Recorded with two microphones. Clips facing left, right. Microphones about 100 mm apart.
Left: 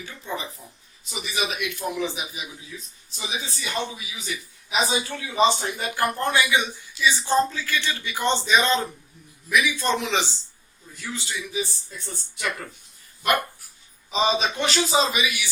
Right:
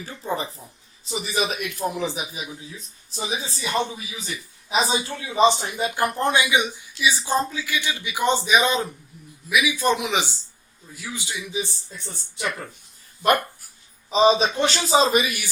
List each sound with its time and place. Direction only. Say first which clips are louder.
0.0 s a man's voice: right 4 dB; 35° right (ahead or behind); by 11.6 s 15° right (ahead or behind)
14.1 s a man's voice: right 5 dB; 35° right (ahead or behind)